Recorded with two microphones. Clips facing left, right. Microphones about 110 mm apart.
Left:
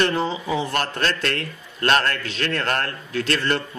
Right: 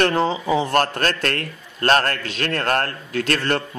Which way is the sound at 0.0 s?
55° right (ahead or behind).